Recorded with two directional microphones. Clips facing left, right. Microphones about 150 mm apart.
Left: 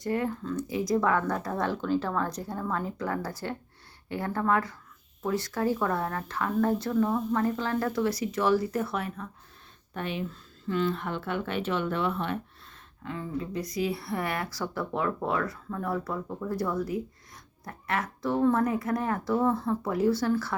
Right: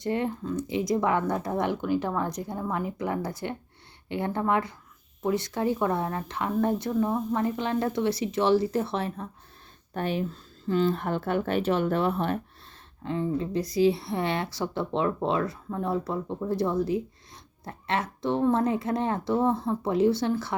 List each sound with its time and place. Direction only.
0.0 s speech: 25° right (ahead or behind); by 12.4 s 40° right (ahead or behind)
13.0 s speech: 30° right (ahead or behind)